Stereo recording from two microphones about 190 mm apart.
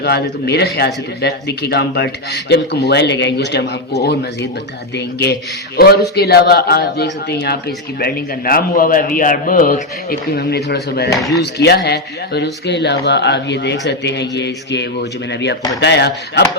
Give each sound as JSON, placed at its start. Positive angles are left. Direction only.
{"t": 0.0, "sound": "a man's voice", "side_deg": 60}